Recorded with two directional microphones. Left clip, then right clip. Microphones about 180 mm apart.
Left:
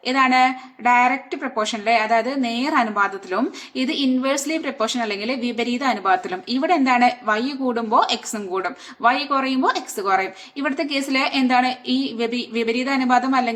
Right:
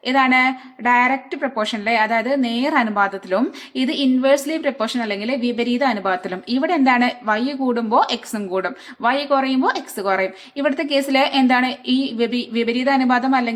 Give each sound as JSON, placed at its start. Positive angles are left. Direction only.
{"t": 0.0, "sound": "speech", "side_deg": -25}